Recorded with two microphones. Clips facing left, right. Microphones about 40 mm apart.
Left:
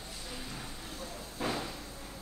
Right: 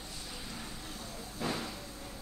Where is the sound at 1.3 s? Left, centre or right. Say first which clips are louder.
Left 1 dB; centre.